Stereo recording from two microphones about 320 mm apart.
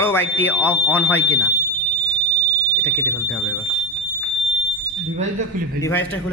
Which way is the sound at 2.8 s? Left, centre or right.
Centre.